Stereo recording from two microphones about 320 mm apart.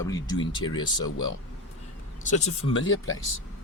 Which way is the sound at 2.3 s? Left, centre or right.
Centre.